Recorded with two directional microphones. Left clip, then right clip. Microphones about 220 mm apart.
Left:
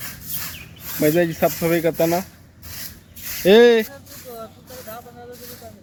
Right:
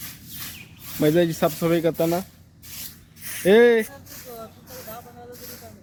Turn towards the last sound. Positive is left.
turn(degrees=45)  # may be behind; listen again after turning